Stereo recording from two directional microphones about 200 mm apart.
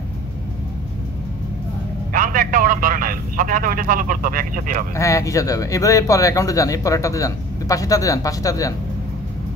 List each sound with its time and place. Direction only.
2.1 s a man's voice: 45° right (ahead or behind)
4.9 s speech: 15° left (ahead or behind)